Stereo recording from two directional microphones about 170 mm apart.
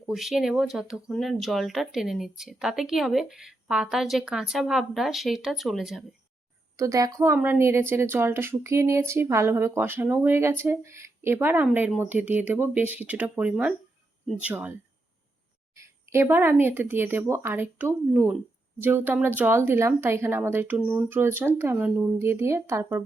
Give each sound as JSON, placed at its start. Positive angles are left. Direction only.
{"t": 0.0, "sound": "speech", "side_deg": 0}
{"t": 6.7, "sound": "speech", "side_deg": -20}